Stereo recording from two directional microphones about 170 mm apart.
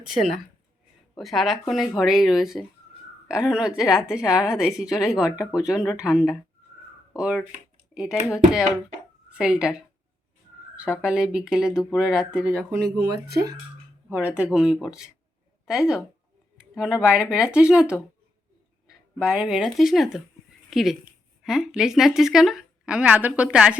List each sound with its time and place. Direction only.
1.2 s speech: centre (ahead or behind)
13.0 s speech: 65° right (ahead or behind)
14.1 s speech: 10° right (ahead or behind)
19.2 s speech: 5° right (ahead or behind)